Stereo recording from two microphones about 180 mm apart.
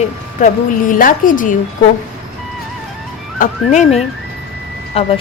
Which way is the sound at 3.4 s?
40° left (ahead or behind).